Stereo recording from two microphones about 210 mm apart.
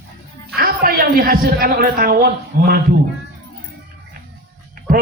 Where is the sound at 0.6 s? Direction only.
45° right (ahead or behind).